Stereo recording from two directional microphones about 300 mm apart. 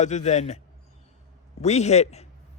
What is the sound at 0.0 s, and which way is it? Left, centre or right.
Speech, left.